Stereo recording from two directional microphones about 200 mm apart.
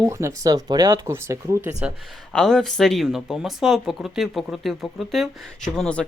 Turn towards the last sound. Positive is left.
turn(degrees=5)  # may be behind; listen again after turning